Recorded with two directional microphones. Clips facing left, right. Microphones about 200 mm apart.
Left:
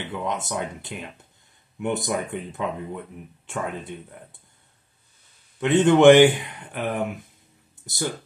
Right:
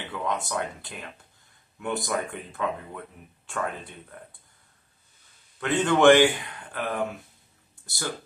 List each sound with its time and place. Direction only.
0.1 s speech: 20° left (ahead or behind)
5.6 s speech: 20° left (ahead or behind)